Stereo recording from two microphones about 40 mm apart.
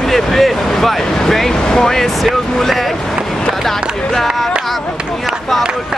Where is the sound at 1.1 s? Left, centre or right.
Centre.